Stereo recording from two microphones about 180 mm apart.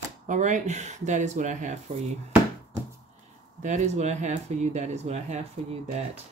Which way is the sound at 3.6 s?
40° right (ahead or behind).